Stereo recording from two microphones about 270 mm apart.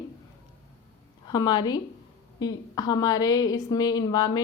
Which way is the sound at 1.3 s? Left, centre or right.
Centre.